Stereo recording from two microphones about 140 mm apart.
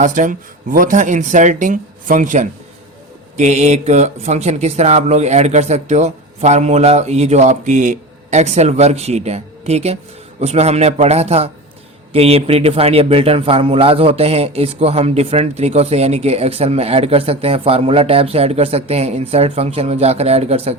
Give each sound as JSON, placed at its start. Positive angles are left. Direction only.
{"t": 0.0, "sound": "speech", "side_deg": -70}
{"t": 3.3, "sound": "a man's voice", "side_deg": -55}